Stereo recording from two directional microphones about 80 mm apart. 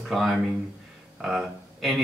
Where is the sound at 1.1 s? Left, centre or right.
Centre.